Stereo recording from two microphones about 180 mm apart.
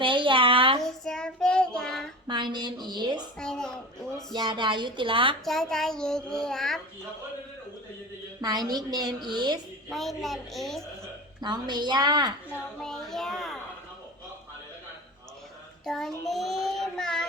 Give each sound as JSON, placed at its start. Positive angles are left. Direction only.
{"t": 0.0, "sound": "a sound", "side_deg": -25}
{"t": 0.8, "sound": "child singing", "side_deg": 0}
{"t": 2.2, "sound": "a woman's voice", "side_deg": -25}
{"t": 3.3, "sound": "a woman's voice", "side_deg": 5}
{"t": 4.4, "sound": "a woman's voice", "side_deg": -25}
{"t": 5.5, "sound": "a child's voice", "side_deg": 0}
{"t": 8.4, "sound": "a woman's voice", "side_deg": -20}
{"t": 9.9, "sound": "a child's voice", "side_deg": 0}
{"t": 11.3, "sound": "a woman's voice", "side_deg": -25}
{"t": 12.8, "sound": "a child's voice", "side_deg": 0}
{"t": 15.9, "sound": "a child's voice", "side_deg": 0}